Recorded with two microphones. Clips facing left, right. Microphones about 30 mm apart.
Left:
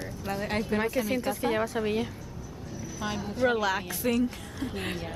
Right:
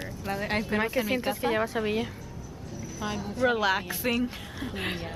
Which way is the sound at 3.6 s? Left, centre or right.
Centre.